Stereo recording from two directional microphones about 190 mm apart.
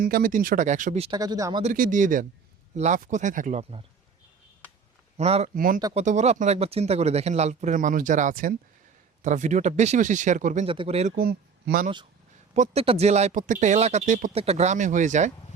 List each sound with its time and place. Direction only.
0.0 s speech: 50° right (ahead or behind); by 1.2 s 30° right (ahead or behind)
1.2 s speech: 20° right (ahead or behind)
1.6 s speech: 45° right (ahead or behind)
5.1 s speech: 35° right (ahead or behind)
5.5 s speech: 50° right (ahead or behind)
5.9 s speech: 35° right (ahead or behind)
10.7 s speech: 30° right (ahead or behind)
11.2 s speech: 55° right (ahead or behind)
12.5 s speech: 30° right (ahead or behind)